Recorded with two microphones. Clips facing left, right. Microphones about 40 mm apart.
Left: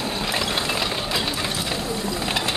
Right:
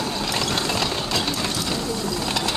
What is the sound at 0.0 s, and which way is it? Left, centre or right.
Vehicle, left.